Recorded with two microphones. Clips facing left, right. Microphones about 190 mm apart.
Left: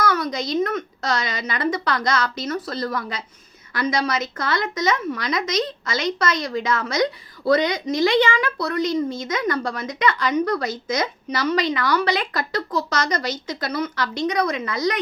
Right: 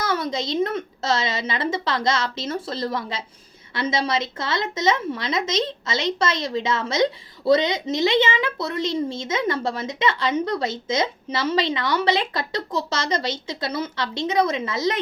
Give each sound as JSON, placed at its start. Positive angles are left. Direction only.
{"t": 0.0, "sound": "a woman's voice", "side_deg": -25}